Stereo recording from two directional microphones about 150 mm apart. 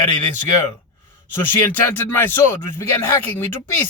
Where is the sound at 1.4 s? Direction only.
15° left (ahead or behind).